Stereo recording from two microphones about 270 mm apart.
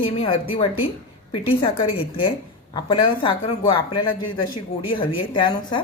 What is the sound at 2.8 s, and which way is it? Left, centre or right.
Speech, centre.